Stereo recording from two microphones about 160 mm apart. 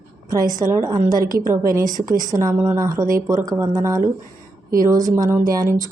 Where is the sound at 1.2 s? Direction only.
65° right (ahead or behind).